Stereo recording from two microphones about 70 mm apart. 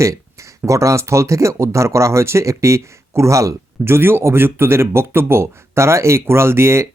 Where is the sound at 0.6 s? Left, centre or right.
Right.